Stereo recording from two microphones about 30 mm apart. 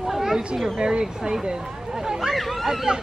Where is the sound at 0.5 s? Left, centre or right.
Centre.